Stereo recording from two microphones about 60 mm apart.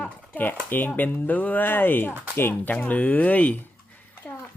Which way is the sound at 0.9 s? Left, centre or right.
Left.